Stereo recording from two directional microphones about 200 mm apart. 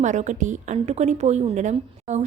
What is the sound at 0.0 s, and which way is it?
A woman's voice, 35° right (ahead or behind).